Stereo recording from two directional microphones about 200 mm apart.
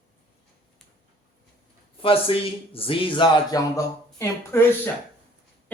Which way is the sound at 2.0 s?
30° left (ahead or behind).